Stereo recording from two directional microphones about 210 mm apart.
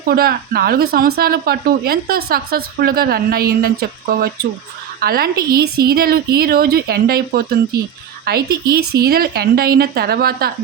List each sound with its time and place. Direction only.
0.0 s speech: 45° right (ahead or behind)